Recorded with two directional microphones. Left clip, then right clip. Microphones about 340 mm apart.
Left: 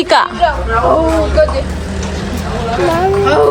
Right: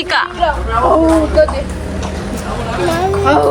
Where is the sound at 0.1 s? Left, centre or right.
Centre.